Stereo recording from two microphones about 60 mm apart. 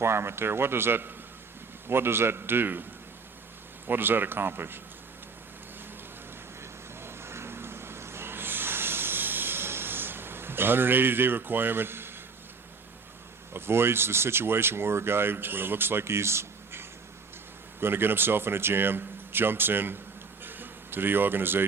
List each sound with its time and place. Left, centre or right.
0.0 s speech: right
3.8 s speech: right
6.6 s vehicle: right
13.5 s speech: right
20.4 s a sound: right